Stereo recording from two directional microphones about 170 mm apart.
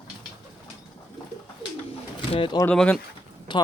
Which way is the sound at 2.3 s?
30° left (ahead or behind).